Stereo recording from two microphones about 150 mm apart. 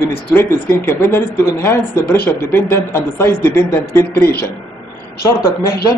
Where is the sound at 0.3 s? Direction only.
15° left (ahead or behind).